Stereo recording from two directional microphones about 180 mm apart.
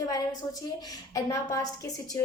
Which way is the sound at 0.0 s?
20° left (ahead or behind).